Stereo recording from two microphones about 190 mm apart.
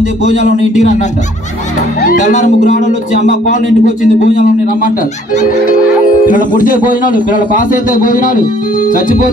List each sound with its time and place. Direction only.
0.2 s speech: 40° left (ahead or behind)
2.1 s a man's voice: 40° left (ahead or behind)